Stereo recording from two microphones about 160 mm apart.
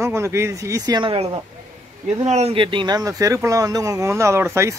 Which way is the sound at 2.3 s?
40° right (ahead or behind).